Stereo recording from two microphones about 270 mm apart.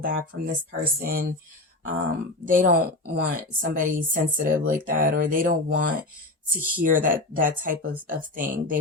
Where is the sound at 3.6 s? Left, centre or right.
Right.